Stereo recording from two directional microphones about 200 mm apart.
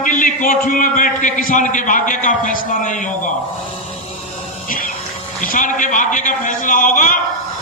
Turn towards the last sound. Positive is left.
turn(degrees=40)  # may be behind; listen again after turning